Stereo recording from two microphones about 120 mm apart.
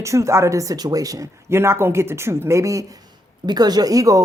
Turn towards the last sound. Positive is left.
turn(degrees=-30)  # may be behind; listen again after turning